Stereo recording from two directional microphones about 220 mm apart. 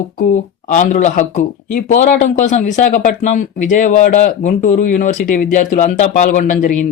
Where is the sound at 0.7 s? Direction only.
35° left (ahead or behind).